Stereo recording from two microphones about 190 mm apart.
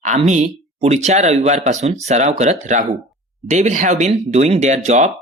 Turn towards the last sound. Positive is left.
turn(degrees=-40)  # may be behind; listen again after turning